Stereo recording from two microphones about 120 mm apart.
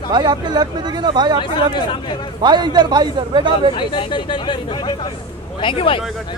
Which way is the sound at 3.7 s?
45° left (ahead or behind).